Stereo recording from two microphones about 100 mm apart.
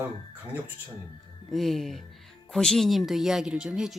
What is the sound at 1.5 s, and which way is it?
Speech, centre (ahead or behind).